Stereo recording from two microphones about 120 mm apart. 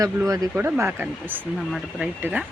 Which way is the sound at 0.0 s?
30° right (ahead or behind).